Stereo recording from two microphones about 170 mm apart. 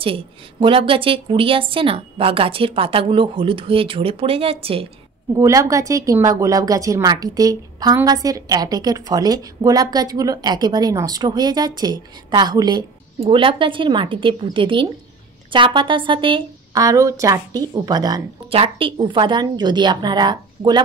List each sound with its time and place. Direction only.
0.0 s a woman's voice: 30° right (ahead or behind)
5.3 s speech: 20° right (ahead or behind)
18.5 s speech: 35° right (ahead or behind)